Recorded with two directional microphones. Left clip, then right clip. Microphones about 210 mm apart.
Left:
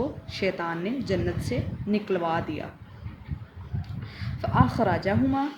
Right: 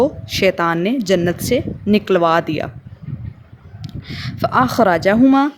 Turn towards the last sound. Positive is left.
turn(degrees=-55)  # may be behind; listen again after turning